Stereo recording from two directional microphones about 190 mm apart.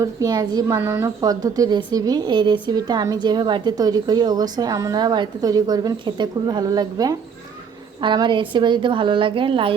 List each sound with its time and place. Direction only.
0.0 s a woman's voice: 20° right (ahead or behind)